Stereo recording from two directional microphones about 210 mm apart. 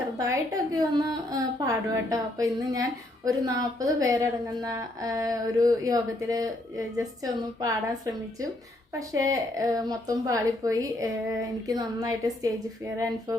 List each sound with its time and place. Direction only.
0.2 s speech: 15° right (ahead or behind)